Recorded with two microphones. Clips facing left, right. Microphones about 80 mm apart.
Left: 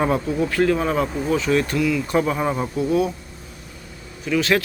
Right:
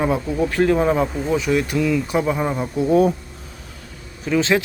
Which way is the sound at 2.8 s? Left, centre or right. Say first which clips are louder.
Right 6 dB; right.